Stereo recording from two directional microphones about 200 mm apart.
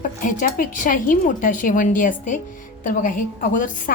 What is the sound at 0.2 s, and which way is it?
A woman's voice, 40° left (ahead or behind).